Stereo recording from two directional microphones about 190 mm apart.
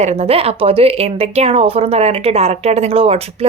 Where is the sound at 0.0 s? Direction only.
35° right (ahead or behind).